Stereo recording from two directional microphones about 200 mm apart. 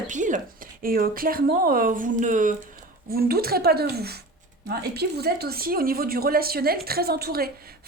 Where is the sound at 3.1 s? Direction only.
50° right (ahead or behind).